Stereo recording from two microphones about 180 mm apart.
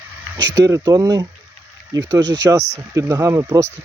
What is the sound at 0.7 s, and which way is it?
Speech, 20° right (ahead or behind).